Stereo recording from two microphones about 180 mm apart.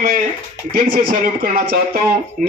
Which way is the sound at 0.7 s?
50° right (ahead or behind).